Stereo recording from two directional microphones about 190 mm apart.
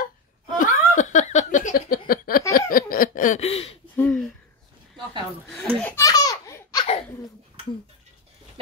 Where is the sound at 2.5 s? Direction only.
50° left (ahead or behind); by 3.7 s 30° left (ahead or behind).